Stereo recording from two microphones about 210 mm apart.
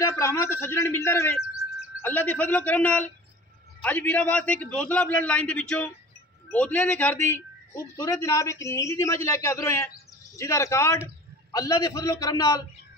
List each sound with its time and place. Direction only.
0.0 s a man's voice: 15° left (ahead or behind)